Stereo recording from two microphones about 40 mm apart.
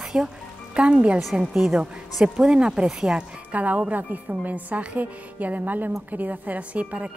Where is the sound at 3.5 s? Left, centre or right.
Right.